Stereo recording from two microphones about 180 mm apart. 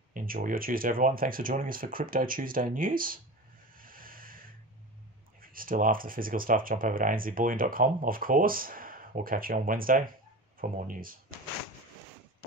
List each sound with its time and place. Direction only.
0.1 s speech: 50° right (ahead or behind)
3.7 s a sound: 50° right (ahead or behind)
5.4 s speech: 50° right (ahead or behind)